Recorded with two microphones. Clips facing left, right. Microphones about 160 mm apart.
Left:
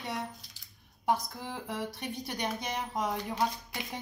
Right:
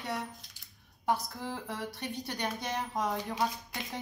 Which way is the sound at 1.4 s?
15° left (ahead or behind).